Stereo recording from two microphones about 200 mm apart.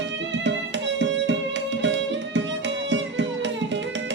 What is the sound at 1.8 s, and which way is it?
Music, 65° right (ahead or behind).